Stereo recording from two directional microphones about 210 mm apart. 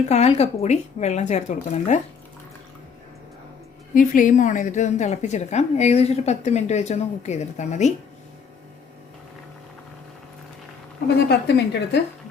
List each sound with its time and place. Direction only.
0.1 s a woman's voice: 30° left (ahead or behind)
3.9 s a woman's voice: 40° left (ahead or behind)
11.3 s a woman's voice: 50° left (ahead or behind)